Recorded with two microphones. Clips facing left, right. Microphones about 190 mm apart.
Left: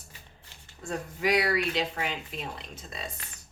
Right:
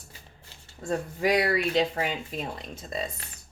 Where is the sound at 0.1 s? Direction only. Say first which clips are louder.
Right 2 dB; 30° right (ahead or behind).